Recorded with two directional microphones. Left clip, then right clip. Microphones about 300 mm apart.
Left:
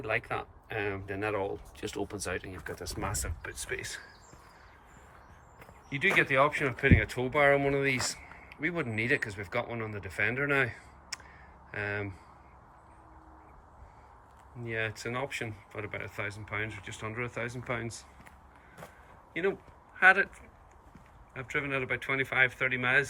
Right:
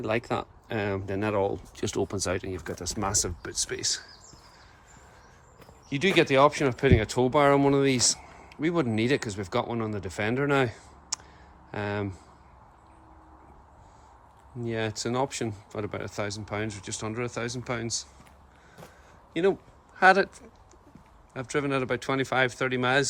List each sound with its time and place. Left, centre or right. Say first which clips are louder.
0.0 s speech: right 4 dB; centre
3.7 s speech: even; centre
5.9 s speech: right 3 dB; centre
14.6 s speech: right 4 dB; centre
19.3 s speech: right 6 dB; centre
21.3 s speech: right 4 dB; centre